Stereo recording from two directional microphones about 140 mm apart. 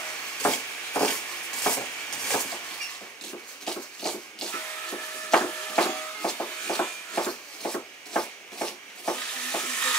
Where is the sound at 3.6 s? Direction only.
5° left (ahead or behind).